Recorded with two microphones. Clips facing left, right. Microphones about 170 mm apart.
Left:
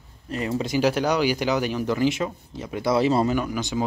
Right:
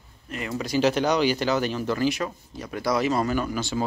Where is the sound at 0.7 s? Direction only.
10° left (ahead or behind); by 3.3 s 30° left (ahead or behind).